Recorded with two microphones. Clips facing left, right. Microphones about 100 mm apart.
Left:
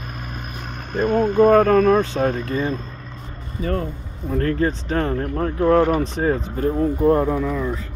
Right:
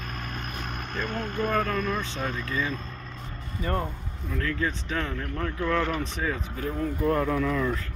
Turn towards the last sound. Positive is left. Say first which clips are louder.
# left 3 dB
turn(degrees=15)  # may be behind; listen again after turning